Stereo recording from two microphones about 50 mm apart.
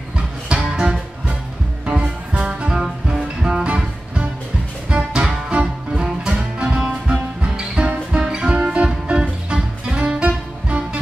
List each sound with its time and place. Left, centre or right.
0.5 s music: centre